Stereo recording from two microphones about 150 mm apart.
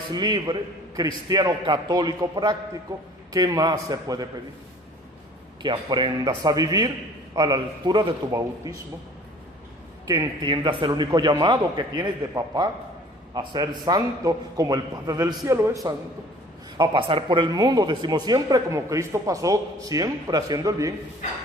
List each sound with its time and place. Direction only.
0.1 s a man's voice: 30° right (ahead or behind)
5.6 s a man's voice: 30° right (ahead or behind)
10.1 s a man's voice: 30° right (ahead or behind)
16.7 s a man's voice: 35° right (ahead or behind)